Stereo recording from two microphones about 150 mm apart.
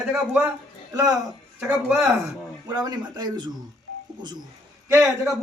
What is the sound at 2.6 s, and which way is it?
Speech, 25° right (ahead or behind).